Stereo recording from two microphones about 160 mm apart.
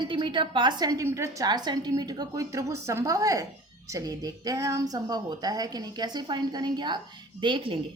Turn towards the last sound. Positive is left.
turn(degrees=-30)  # may be behind; listen again after turning